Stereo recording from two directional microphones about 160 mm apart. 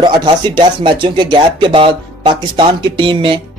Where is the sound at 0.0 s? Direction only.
25° right (ahead or behind).